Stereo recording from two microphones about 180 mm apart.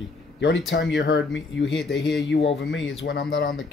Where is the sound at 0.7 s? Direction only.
70° left (ahead or behind).